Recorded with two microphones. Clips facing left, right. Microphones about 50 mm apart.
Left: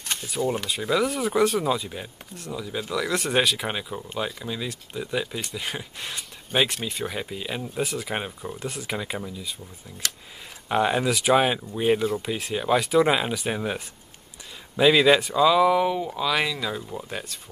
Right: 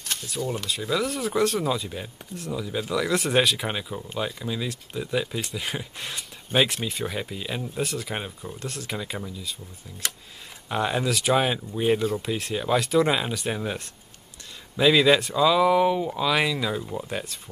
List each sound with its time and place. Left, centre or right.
0.1 s speech: centre
10.0 s speech: centre
10.7 s speech: centre